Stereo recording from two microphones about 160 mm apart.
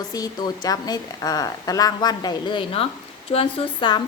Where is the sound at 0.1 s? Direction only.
25° left (ahead or behind).